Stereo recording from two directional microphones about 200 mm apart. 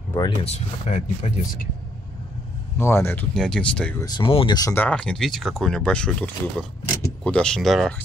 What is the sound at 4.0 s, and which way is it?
Speech, 20° left (ahead or behind).